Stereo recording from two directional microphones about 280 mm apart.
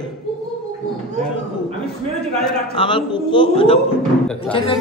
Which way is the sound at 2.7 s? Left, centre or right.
Centre.